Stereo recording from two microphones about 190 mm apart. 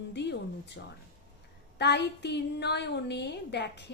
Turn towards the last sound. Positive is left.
turn(degrees=65)  # may be behind; listen again after turning